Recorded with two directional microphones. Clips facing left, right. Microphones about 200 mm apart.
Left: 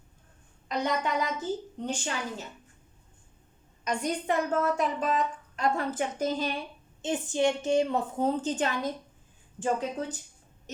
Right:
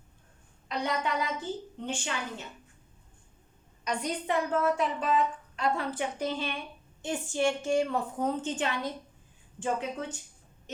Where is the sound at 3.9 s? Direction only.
45° left (ahead or behind).